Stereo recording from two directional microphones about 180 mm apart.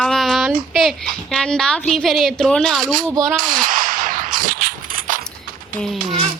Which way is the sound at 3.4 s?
50° right (ahead or behind).